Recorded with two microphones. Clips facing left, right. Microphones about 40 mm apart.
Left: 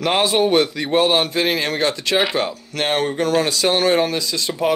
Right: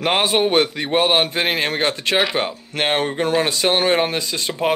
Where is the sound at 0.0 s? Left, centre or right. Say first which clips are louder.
Left 1 dB; right.